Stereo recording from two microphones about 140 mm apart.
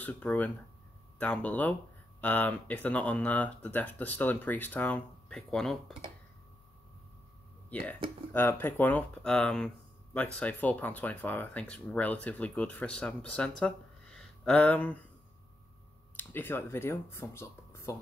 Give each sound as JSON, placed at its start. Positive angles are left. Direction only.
{"t": 0.0, "sound": "speech", "side_deg": 10}
{"t": 8.3, "sound": "speech", "side_deg": 15}
{"t": 13.6, "sound": "a sound", "side_deg": 5}
{"t": 16.2, "sound": "speech", "side_deg": 15}